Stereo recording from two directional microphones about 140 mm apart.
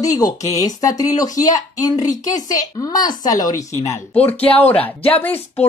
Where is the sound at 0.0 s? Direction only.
25° left (ahead or behind).